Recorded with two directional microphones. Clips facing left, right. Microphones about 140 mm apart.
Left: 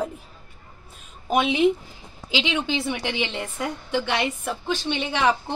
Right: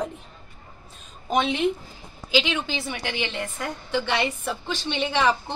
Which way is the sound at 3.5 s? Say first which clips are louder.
Left 3 dB; 10° left (ahead or behind).